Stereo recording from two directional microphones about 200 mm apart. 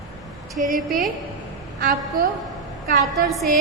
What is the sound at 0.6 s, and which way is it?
A woman's voice, 40° right (ahead or behind).